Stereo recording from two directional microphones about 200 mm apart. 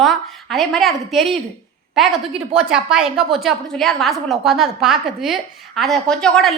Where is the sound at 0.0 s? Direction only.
Centre (ahead or behind).